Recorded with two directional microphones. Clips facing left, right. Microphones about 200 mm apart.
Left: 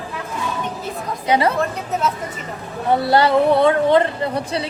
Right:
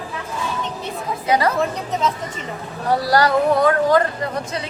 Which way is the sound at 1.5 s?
5° left (ahead or behind).